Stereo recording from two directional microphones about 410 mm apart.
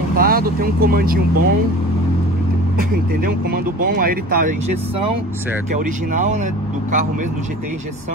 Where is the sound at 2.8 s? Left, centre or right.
Right.